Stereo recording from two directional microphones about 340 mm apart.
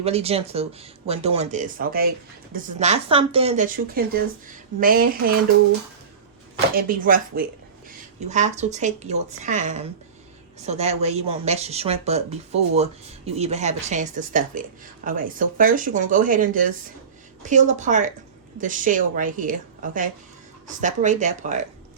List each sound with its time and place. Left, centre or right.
0.0 s speech: centre
6.7 s speech: right